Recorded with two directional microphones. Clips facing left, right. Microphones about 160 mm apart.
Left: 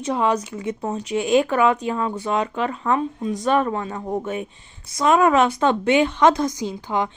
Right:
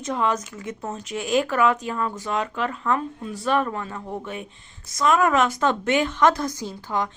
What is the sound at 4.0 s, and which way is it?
Speech, 40° left (ahead or behind).